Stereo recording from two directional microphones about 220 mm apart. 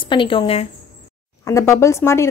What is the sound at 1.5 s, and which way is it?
Speech, 15° left (ahead or behind).